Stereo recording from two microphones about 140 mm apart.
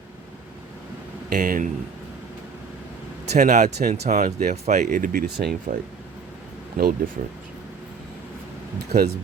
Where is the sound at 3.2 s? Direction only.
55° right (ahead or behind); by 4.6 s 75° right (ahead or behind).